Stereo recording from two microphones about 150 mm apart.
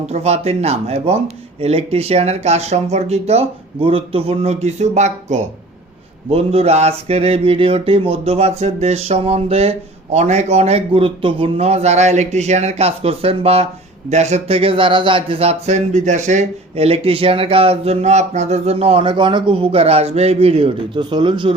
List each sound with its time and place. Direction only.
0.0 s speech: 45° right (ahead or behind)
21.0 s speech: 30° right (ahead or behind)